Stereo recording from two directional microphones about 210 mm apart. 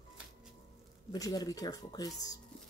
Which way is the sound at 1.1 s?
20° left (ahead or behind).